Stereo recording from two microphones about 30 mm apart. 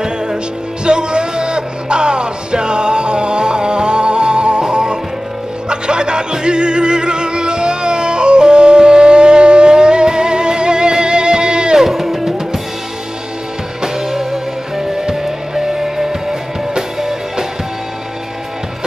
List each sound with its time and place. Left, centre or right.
0.8 s music: right
11.8 s music: centre
13.9 s music: centre